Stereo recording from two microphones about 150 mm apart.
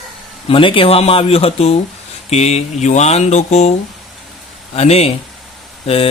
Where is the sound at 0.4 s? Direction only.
35° left (ahead or behind).